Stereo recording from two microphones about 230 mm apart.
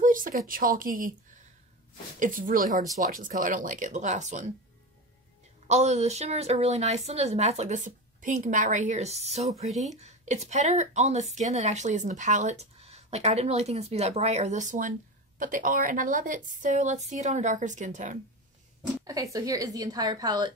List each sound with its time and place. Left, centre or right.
0.0 s a woman's voice: right
2.1 s a woman's voice: right
5.7 s a woman's voice: right
18.8 s a woman's voice: centre